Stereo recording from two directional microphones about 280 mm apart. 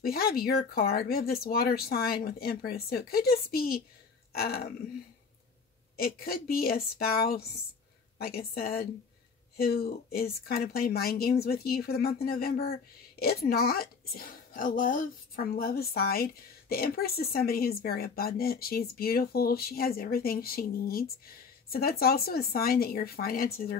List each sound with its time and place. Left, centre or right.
0.0 s speech: left
5.9 s speech: left